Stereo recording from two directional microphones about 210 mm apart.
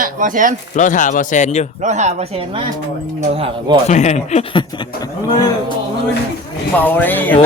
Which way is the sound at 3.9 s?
35° left (ahead or behind).